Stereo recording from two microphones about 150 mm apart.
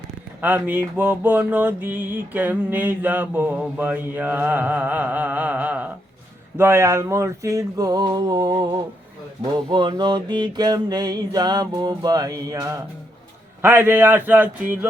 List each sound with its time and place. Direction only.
0.4 s mantra: 10° right (ahead or behind)
6.6 s music: 15° right (ahead or behind)
13.6 s mantra: 15° right (ahead or behind)